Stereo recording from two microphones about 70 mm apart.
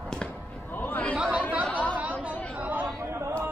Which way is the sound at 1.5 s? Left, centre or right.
Right.